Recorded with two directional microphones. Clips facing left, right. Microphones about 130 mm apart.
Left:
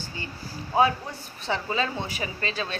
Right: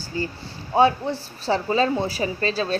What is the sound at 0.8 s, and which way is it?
A woman's voice, 30° right (ahead or behind).